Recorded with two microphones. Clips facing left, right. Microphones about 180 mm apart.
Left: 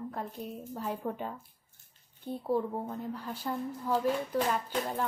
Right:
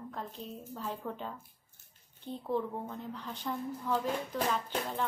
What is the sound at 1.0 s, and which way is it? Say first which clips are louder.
Speech: left 4 dB; 25° left (ahead or behind).